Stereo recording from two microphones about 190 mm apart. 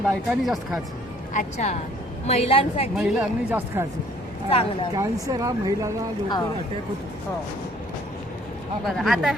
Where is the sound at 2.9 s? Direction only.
5° right (ahead or behind).